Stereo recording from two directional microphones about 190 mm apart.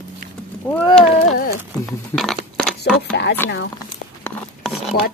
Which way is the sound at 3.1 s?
60° left (ahead or behind).